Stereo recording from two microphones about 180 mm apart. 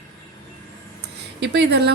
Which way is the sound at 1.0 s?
70° right (ahead or behind).